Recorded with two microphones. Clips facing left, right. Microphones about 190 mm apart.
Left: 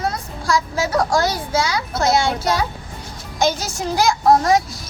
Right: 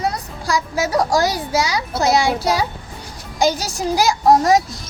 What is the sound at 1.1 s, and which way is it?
Speech, 40° right (ahead or behind).